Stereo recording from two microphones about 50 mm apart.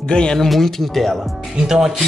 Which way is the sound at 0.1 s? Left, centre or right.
Centre.